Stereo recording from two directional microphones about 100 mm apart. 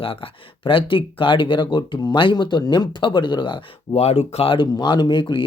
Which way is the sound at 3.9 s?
90° left.